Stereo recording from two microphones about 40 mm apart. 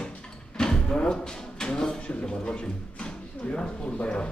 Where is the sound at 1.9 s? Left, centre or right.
Left.